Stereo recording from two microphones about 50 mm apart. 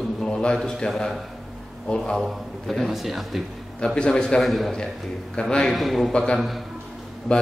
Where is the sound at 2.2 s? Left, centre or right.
Centre.